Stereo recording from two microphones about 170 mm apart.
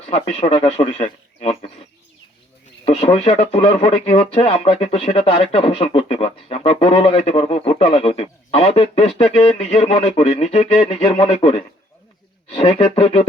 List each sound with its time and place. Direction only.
0.1 s speech: 35° left (ahead or behind)
2.8 s speech: 35° left (ahead or behind)